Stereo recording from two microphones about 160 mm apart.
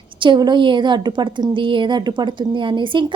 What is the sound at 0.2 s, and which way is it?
A woman's voice, 30° right (ahead or behind).